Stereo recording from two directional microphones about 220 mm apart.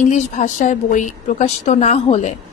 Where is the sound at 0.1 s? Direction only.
35° left (ahead or behind).